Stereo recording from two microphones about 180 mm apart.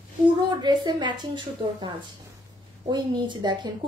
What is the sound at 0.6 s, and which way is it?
A woman's voice, 25° right (ahead or behind).